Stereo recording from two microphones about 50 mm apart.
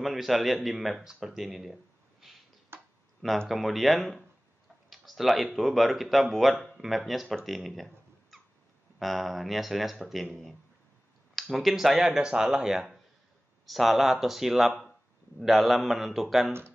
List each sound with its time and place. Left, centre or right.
0.0 s speech: centre
2.7 s tick-tock: right
3.4 s speech: centre
7.4 s a sound: centre
9.0 s speech: centre